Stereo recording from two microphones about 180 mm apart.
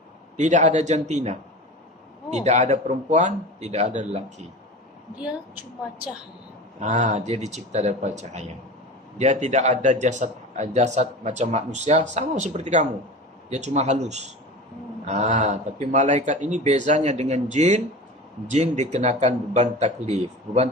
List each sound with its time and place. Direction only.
0.3 s a man's voice: 40° right (ahead or behind)
6.7 s a man's voice: 45° right (ahead or behind)